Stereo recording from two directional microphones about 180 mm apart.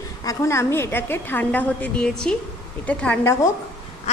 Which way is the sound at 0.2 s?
20° left (ahead or behind).